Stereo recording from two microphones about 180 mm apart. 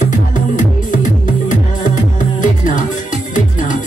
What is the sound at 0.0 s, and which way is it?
Music, 45° left (ahead or behind).